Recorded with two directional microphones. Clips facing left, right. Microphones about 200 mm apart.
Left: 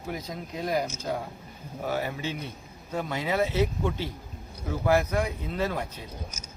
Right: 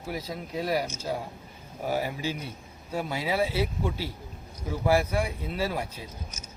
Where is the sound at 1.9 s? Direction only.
10° right (ahead or behind).